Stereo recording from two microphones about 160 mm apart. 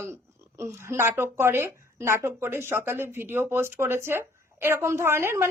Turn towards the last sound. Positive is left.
turn(degrees=-15)  # may be behind; listen again after turning